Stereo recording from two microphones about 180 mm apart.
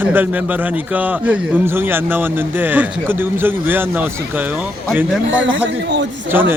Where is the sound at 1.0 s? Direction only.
10° right (ahead or behind).